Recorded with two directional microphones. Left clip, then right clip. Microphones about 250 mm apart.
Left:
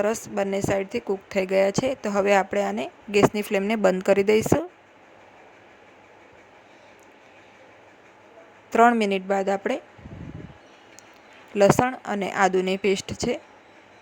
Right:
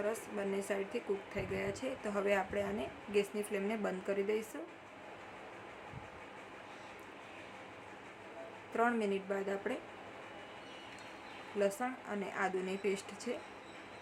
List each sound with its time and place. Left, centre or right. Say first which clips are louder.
0.0 s a woman's voice: left 13 dB; left
8.7 s a woman's voice: left 16 dB; left
11.6 s a woman's voice: left 17 dB; left